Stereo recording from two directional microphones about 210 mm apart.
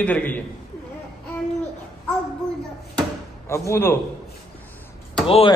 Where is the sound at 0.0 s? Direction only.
5° left (ahead or behind).